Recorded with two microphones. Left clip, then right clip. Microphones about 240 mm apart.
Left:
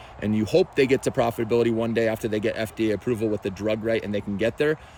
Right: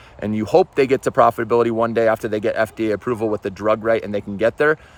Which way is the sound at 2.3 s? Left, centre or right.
Right.